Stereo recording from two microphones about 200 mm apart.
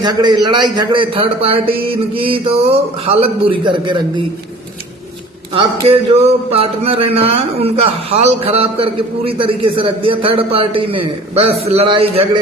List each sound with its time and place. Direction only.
0.0 s speech: 20° right (ahead or behind)
5.5 s speech: 25° right (ahead or behind)